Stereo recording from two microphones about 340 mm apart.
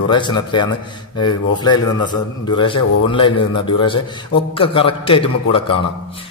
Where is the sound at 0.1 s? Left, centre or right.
Centre.